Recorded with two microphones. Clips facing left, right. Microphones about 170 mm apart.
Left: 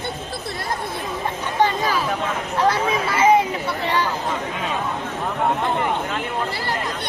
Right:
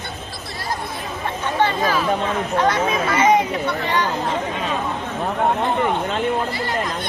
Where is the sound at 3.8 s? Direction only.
30° left (ahead or behind).